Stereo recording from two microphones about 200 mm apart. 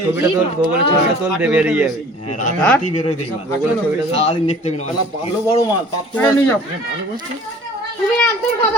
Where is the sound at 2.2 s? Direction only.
35° left (ahead or behind).